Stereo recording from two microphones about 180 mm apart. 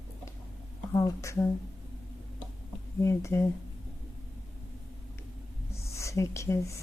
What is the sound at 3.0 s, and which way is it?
Speech, 15° left (ahead or behind).